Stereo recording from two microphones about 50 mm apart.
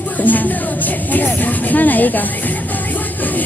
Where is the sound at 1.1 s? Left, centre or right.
Left.